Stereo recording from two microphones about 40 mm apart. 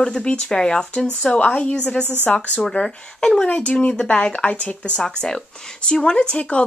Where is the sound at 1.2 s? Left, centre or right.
Left.